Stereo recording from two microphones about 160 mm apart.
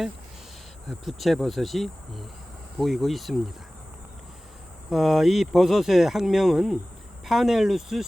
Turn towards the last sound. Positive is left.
turn(degrees=0)  # may be behind; listen again after turning